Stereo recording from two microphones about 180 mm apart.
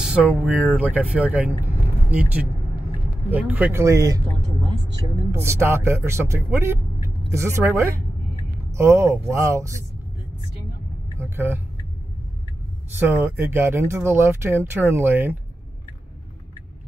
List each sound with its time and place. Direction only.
0.0 s a sound: 5° right (ahead or behind)
0.7 s speech: 10° right (ahead or behind)
1.7 s vehicle: 10° right (ahead or behind)
3.3 s speech: 10° right (ahead or behind)
5.3 s speech: 15° right (ahead or behind)
11.1 s speech: 15° right (ahead or behind)
13.0 s speech: 10° right (ahead or behind)